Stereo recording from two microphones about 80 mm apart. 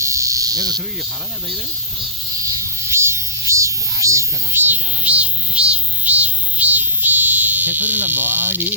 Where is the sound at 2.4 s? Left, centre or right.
Right.